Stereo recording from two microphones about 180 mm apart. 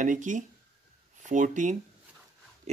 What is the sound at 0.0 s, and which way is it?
Speech, 45° right (ahead or behind).